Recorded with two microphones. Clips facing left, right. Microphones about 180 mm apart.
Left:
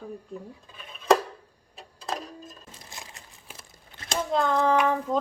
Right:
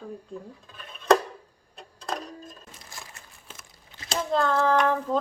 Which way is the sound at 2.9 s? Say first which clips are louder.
Left 1 dB; 20° left (ahead or behind).